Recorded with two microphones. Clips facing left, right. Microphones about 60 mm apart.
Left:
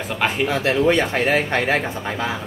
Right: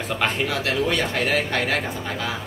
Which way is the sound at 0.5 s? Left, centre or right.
Left.